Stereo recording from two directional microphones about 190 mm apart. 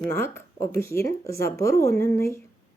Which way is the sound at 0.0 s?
15° left (ahead or behind).